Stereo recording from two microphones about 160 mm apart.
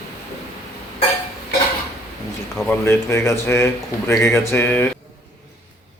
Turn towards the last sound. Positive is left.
turn(degrees=15)  # may be behind; listen again after turning